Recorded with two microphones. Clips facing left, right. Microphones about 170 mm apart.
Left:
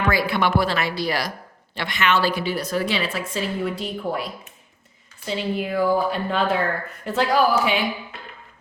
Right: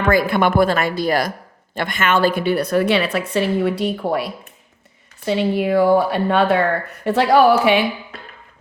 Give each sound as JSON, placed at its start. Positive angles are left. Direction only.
{"t": 0.0, "sound": "a woman's voice", "side_deg": -50}